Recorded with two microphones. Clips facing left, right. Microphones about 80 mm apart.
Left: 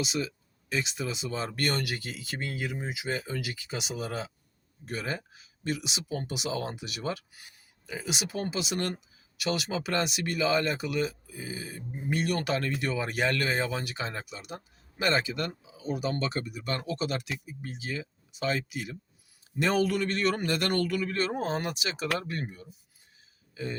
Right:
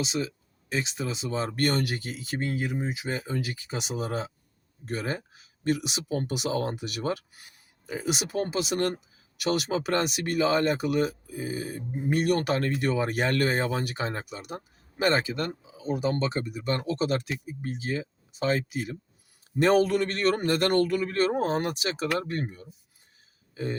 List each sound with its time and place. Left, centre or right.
0.0 s speech: right